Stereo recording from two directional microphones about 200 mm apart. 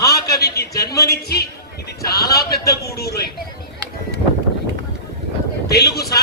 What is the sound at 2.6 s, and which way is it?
Speech, 15° left (ahead or behind).